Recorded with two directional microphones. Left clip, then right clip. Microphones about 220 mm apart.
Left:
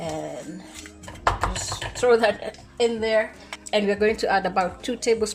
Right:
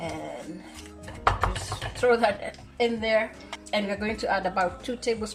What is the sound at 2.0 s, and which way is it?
Speech, 40° left (ahead or behind).